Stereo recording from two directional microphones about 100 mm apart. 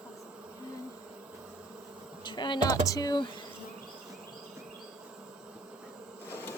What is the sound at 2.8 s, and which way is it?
Speech, 40° left (ahead or behind).